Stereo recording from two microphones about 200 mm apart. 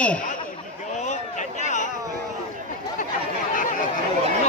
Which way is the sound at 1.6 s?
35° left (ahead or behind).